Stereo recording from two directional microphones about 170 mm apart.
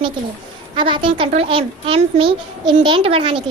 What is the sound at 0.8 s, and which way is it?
A woman's voice, 30° right (ahead or behind).